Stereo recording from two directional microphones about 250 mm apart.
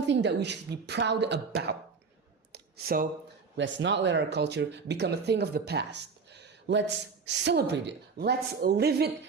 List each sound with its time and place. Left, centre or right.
0.1 s speech: right
2.5 s a sound: right
3.6 s speech: right